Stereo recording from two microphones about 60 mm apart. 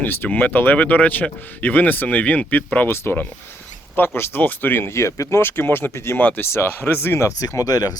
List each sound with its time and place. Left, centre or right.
0.0 s speech: left
2.9 s speech: left
5.4 s speech: left
7.4 s speech: left